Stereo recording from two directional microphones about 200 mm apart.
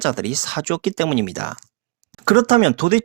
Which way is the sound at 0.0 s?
30° right (ahead or behind).